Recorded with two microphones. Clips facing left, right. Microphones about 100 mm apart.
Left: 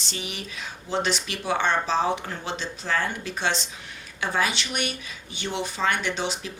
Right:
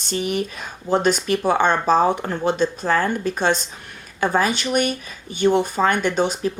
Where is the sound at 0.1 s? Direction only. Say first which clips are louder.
Right 13 dB; 50° right (ahead or behind).